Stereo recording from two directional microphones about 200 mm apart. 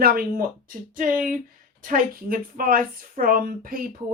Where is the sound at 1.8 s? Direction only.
45° right (ahead or behind).